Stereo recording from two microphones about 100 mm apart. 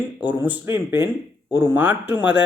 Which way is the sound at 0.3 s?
15° right (ahead or behind).